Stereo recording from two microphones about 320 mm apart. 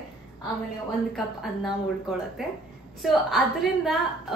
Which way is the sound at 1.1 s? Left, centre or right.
Centre.